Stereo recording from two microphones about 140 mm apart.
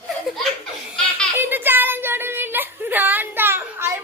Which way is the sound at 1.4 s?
15° right (ahead or behind).